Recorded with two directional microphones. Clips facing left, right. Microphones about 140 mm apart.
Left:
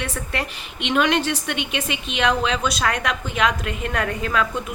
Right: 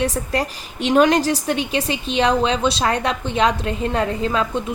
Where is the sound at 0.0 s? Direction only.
35° right (ahead or behind).